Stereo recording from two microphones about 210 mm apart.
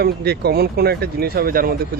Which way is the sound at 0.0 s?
50° right (ahead or behind).